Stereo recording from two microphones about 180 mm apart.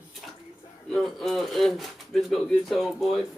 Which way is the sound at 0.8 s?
Centre (ahead or behind).